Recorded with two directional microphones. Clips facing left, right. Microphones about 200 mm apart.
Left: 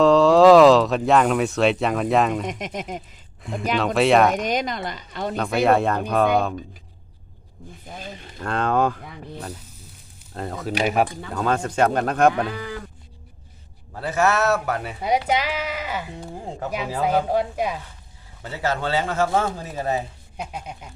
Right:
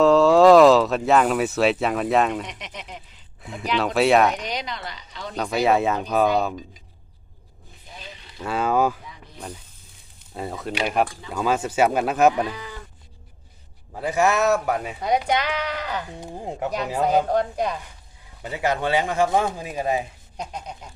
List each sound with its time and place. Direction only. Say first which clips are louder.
0.0 s speech: left 1 dB; centre (ahead or behind)
2.5 s speech: left 8 dB; 45° left (ahead or behind)
3.4 s speech: left 2 dB; centre (ahead or behind)
4.4 s speech: left 6 dB; 50° left (ahead or behind)
5.4 s speech: left 1 dB; centre (ahead or behind)
7.9 s a sound: left 5 dB; 50° left (ahead or behind)
8.4 s speech: even; 5° right (ahead or behind)
10.3 s speech: left 2 dB; 5° right (ahead or behind)
13.9 s speech: even; 15° right (ahead or behind)
15.3 s speech: even; 5° left (ahead or behind)
16.2 s speech: right 2 dB; 15° right (ahead or behind)
17.2 s speech: even; 5° left (ahead or behind)
18.4 s speech: right 1 dB; 15° right (ahead or behind)
20.3 s speech: even; 5° left (ahead or behind)